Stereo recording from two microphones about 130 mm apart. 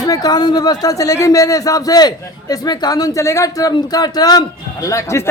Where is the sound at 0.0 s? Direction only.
30° left (ahead or behind).